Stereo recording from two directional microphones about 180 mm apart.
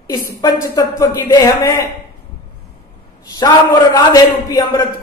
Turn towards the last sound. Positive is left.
turn(degrees=20)  # may be behind; listen again after turning